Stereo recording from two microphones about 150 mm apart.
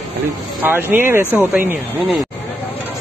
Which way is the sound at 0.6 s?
15° right (ahead or behind).